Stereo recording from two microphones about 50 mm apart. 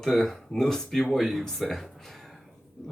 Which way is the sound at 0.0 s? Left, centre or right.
Centre.